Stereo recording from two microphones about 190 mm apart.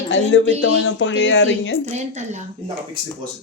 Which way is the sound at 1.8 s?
35° right (ahead or behind).